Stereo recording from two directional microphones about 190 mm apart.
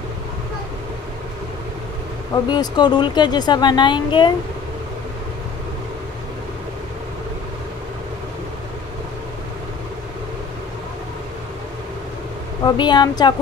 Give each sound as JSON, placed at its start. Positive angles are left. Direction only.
{"t": 2.3, "sound": "a woman's voice", "side_deg": 20}
{"t": 12.6, "sound": "a woman's voice", "side_deg": 25}